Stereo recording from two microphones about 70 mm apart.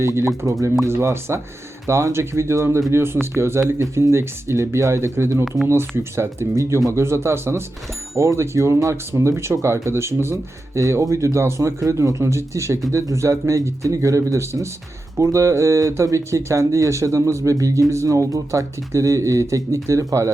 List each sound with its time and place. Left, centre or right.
0.0 s speech: right